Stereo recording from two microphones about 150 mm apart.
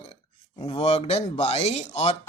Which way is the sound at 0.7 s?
40° left (ahead or behind).